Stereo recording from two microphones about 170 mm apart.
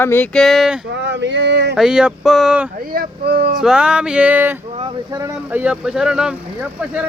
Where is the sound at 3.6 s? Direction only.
5° right (ahead or behind).